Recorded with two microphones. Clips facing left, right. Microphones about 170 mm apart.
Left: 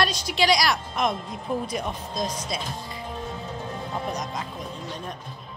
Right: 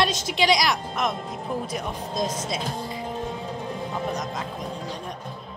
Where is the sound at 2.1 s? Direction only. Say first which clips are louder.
Right 4 dB; 25° right (ahead or behind).